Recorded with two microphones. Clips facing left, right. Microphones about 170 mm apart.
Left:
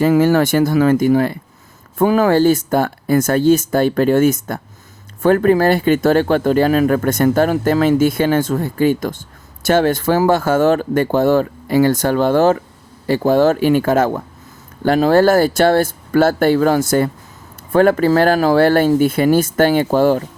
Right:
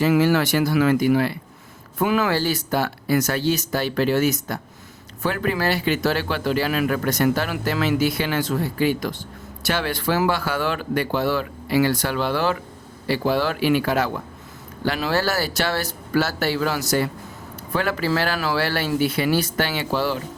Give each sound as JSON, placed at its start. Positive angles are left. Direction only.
{"t": 0.0, "sound": "speech", "side_deg": 45}